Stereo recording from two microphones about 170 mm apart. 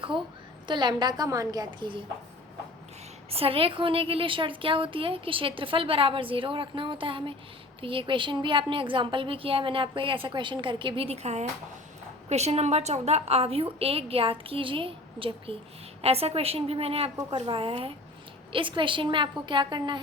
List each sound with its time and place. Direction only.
0.7 s a woman's voice: 25° right (ahead or behind)
3.2 s a woman's voice: 35° right (ahead or behind)